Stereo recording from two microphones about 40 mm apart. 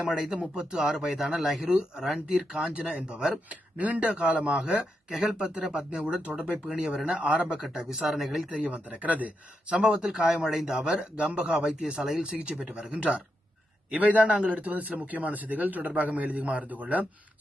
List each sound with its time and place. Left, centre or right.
0.0 s speech: centre
1.6 s speech: centre
7.1 s a man's voice: right
7.5 s speech: centre
8.5 s a man's voice: right
9.7 s a man's voice: right
12.5 s a man's voice: centre; by 17.1 s right